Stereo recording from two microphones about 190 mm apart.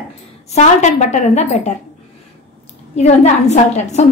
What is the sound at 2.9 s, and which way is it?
Speech, 35° left (ahead or behind).